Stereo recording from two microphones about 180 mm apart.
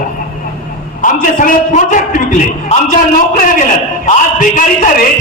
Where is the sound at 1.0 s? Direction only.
50° left (ahead or behind).